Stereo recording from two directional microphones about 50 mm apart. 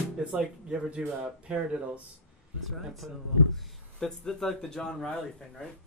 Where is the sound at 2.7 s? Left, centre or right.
Centre.